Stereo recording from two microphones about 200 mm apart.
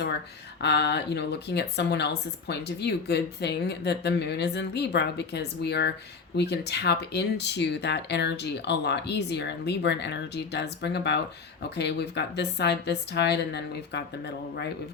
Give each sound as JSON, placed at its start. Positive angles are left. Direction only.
{"t": 0.6, "sound": "speech", "side_deg": 55}